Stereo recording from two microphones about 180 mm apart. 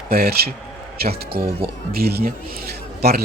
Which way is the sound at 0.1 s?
60° right (ahead or behind).